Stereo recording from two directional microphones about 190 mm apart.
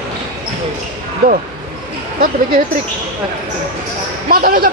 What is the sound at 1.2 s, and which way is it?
Speech, 55° right (ahead or behind).